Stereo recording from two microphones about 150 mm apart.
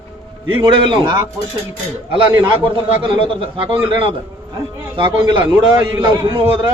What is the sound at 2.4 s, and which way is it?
A man's voice, 35° right (ahead or behind).